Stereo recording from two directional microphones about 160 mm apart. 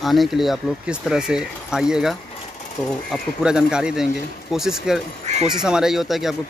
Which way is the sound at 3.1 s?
5° right (ahead or behind).